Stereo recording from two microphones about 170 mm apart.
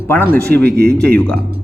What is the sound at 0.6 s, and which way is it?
Speech, 70° right (ahead or behind).